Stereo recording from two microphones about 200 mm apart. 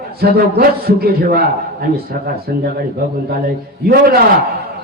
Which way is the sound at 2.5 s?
50° right (ahead or behind).